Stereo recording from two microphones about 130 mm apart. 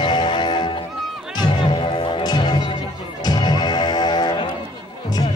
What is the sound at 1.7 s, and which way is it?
Music, 40° left (ahead or behind).